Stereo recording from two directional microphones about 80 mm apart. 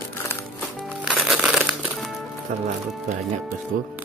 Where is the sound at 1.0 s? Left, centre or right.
Centre.